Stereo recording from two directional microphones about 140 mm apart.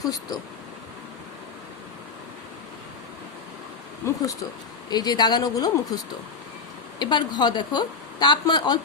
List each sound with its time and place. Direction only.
0.0 s speech: 25° left (ahead or behind)
4.0 s speech: 20° left (ahead or behind)
7.0 s a woman's voice: 30° left (ahead or behind)